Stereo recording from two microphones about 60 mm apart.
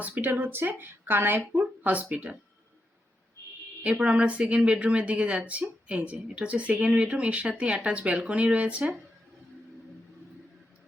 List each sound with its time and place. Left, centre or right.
0.0 s a woman's voice: right
3.8 s speech: right